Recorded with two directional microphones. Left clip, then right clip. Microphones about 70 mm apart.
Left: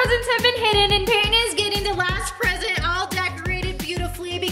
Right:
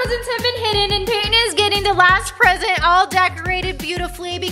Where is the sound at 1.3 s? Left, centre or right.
Right.